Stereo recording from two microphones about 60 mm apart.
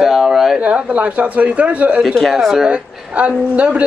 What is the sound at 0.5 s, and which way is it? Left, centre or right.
Speech, centre.